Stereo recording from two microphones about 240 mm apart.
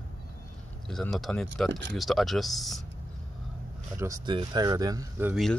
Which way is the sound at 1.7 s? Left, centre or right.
Right.